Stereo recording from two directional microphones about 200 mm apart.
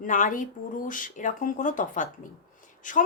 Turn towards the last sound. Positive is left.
turn(degrees=40)  # may be behind; listen again after turning